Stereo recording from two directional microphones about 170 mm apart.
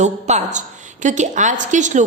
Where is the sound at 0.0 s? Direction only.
45° right (ahead or behind).